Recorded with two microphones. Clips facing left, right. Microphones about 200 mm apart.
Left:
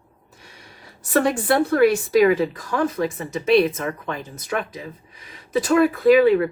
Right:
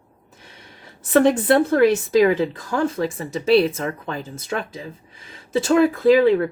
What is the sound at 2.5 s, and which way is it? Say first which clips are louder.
Speech: right 1 dB; 30° right (ahead or behind).